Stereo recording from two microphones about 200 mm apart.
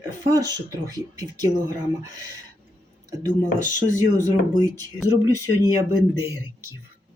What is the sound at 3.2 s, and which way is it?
Speech, 40° left (ahead or behind).